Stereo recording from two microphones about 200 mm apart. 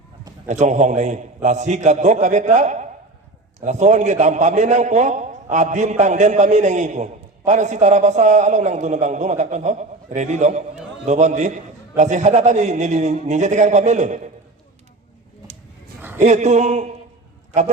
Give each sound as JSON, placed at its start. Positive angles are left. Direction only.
{"t": 0.4, "sound": "a man's voice", "side_deg": -35}
{"t": 16.0, "sound": "a sound", "side_deg": -10}
{"t": 16.2, "sound": "a man's voice", "side_deg": -35}